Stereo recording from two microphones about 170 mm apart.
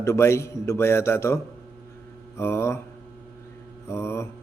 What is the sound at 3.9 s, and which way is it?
Speech, 15° left (ahead or behind).